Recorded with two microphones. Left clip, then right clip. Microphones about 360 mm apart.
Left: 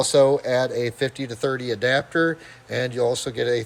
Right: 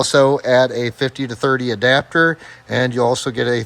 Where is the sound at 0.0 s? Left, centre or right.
Centre.